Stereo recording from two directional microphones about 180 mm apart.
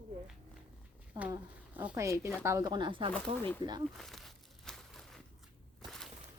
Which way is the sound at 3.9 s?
Centre (ahead or behind).